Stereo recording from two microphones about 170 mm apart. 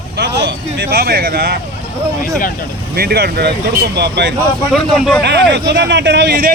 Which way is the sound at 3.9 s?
80° right.